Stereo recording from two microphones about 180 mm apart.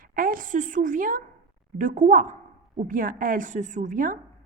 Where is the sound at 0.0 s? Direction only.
50° right (ahead or behind).